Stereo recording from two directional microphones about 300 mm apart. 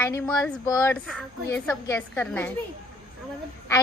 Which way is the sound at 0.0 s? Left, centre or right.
Centre.